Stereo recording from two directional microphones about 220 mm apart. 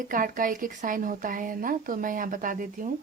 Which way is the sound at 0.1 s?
40° right (ahead or behind).